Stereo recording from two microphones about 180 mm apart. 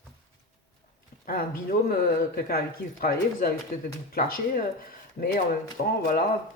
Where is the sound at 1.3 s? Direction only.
55° left (ahead or behind).